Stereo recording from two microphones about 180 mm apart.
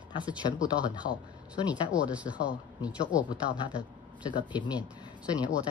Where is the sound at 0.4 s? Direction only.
30° left (ahead or behind).